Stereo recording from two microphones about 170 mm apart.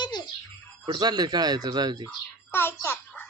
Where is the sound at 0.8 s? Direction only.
25° right (ahead or behind).